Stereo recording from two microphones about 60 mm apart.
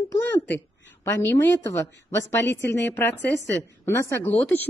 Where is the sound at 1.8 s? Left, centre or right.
Left.